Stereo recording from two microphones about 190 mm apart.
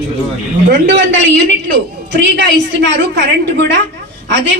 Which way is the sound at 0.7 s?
70° right (ahead or behind).